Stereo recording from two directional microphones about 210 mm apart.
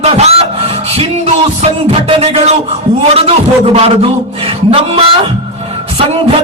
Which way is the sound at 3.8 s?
25° right (ahead or behind).